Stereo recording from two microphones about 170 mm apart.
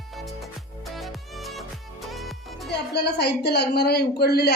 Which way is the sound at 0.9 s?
Centre (ahead or behind).